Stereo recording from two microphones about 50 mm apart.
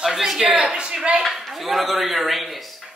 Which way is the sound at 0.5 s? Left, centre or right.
Centre.